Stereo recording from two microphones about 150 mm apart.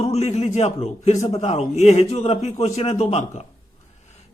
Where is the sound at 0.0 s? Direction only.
45° left (ahead or behind).